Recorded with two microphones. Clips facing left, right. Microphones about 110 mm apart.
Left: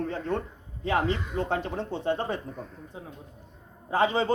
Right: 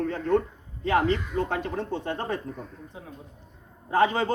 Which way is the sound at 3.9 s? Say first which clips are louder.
Right 2 dB; 20° left (ahead or behind).